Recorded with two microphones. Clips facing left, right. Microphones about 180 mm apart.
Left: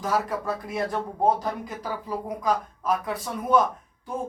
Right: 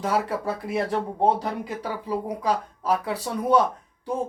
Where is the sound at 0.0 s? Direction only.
30° right (ahead or behind).